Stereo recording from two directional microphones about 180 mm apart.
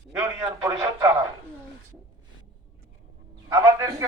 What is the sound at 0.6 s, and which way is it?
Speech, 20° right (ahead or behind).